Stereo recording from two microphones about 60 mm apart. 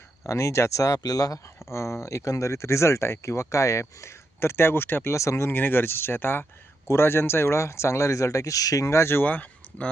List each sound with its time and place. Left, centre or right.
0.3 s speech: left
1.7 s speech: left
5.1 s speech: left
5.5 s speech: left
9.2 s speech: left